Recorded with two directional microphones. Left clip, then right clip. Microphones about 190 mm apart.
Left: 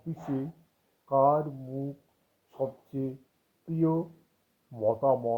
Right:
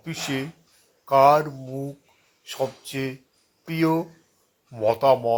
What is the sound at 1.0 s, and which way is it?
Speech, 40° right (ahead or behind).